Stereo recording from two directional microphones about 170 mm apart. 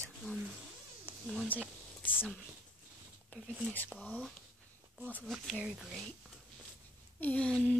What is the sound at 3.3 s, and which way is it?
Speech, 10° left (ahead or behind).